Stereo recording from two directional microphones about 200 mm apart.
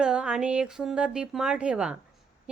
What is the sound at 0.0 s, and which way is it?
Speech, 5° right (ahead or behind).